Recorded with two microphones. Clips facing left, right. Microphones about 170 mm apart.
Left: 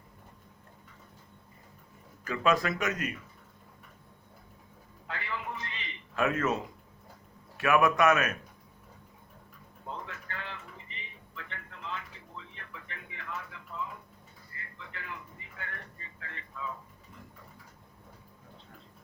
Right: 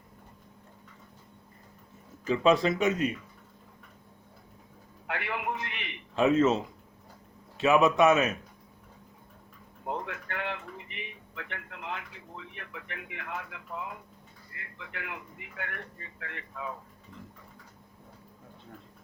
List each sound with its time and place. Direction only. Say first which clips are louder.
2.2 s speech: right 4 dB; 25° right (ahead or behind)
5.0 s a sound: right 5 dB; 65° right (ahead or behind)
6.1 s speech: right 6 dB; 25° right (ahead or behind)
7.6 s speech: right 3 dB; 20° right (ahead or behind)
9.8 s a sound: right 6 dB; 60° right (ahead or behind)
14.5 s speech: right 3 dB; 65° right (ahead or behind)